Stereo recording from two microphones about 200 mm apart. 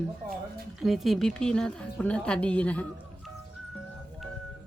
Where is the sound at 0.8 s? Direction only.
Centre (ahead or behind).